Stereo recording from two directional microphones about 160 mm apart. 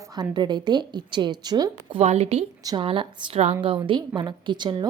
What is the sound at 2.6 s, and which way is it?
A woman's voice, 30° right (ahead or behind).